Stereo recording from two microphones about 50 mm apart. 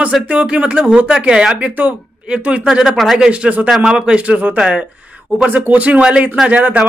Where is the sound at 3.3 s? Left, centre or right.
Right.